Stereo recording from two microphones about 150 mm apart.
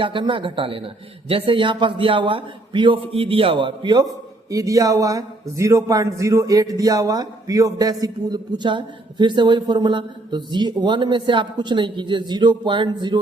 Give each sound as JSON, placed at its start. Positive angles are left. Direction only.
{"t": 0.0, "sound": "a man's voice", "side_deg": -35}